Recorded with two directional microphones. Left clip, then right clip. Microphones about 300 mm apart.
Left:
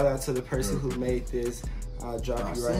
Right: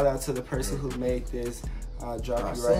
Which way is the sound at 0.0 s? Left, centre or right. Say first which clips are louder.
Even; centre.